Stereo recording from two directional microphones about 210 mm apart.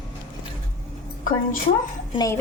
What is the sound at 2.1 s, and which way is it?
Speech, 15° left (ahead or behind).